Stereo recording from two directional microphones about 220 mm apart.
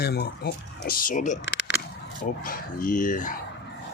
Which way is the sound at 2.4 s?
40° left (ahead or behind).